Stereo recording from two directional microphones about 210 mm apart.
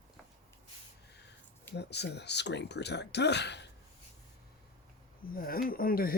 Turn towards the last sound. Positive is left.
turn(degrees=45)  # may be behind; listen again after turning